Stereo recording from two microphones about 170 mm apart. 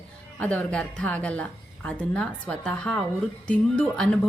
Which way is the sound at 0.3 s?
5° left (ahead or behind).